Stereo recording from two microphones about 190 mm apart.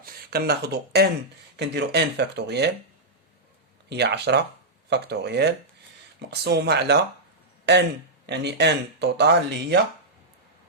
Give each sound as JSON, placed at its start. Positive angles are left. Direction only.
{"t": 0.0, "sound": "speech", "side_deg": -55}
{"t": 3.8, "sound": "speech", "side_deg": -60}